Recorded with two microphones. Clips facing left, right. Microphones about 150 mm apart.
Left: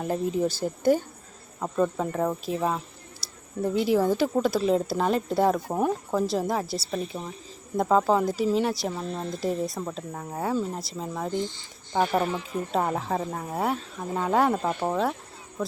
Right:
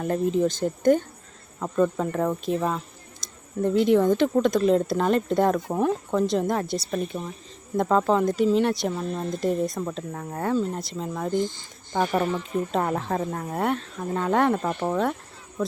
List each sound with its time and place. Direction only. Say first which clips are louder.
0.0 s speech: right 3 dB; 5° left (ahead or behind)
11.3 s speech: right 6 dB; 50° right (ahead or behind)
11.9 s speech: right 1 dB; 10° left (ahead or behind)